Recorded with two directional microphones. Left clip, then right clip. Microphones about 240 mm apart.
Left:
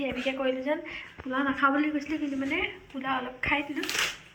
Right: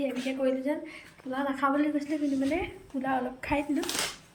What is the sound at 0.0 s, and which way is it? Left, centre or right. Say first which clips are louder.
A woman's voice: even; centre.